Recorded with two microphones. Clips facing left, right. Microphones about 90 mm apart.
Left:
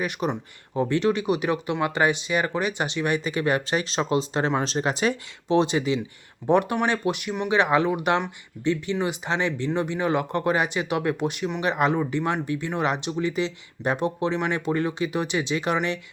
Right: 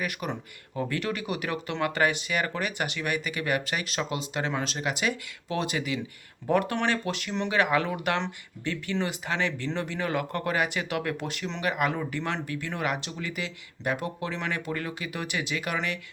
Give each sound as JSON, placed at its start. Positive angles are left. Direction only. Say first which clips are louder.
{"t": 0.0, "sound": "speech", "louder": "left 5 dB", "side_deg": 25}